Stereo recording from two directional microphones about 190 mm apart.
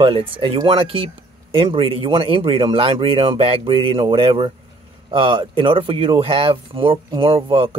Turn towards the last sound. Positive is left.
turn(degrees=-30)  # may be behind; listen again after turning